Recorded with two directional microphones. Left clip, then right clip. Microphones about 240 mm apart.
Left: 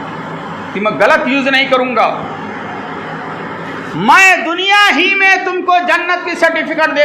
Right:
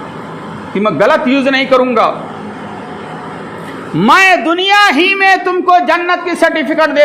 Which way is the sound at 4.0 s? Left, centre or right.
Right.